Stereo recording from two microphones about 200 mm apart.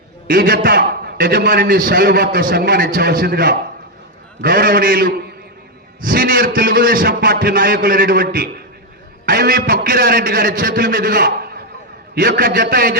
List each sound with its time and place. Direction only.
0.3 s a man's voice: 50° right (ahead or behind)